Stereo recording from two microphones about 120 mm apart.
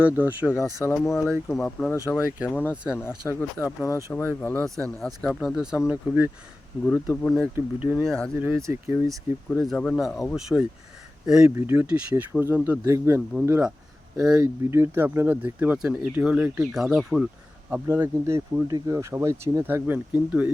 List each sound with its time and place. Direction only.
0.0 s speech: 15° right (ahead or behind)
0.6 s speech: 25° left (ahead or behind)
1.5 s speech: 5° left (ahead or behind)
1.9 s speech: 25° left (ahead or behind)
4.6 s speech: 5° left (ahead or behind)
5.9 s speech: 15° right (ahead or behind)
6.8 s speech: 15° left (ahead or behind)
7.5 s speech: 10° right (ahead or behind)
8.0 s speech: 5° left (ahead or behind)
8.6 s speech: 20° right (ahead or behind)
9.0 s speech: centre (ahead or behind)
11.5 s speech: 20° right (ahead or behind); by 17.2 s centre (ahead or behind)
17.7 s speech: 15° right (ahead or behind)